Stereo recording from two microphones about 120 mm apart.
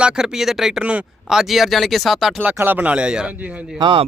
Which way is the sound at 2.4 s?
15° right (ahead or behind).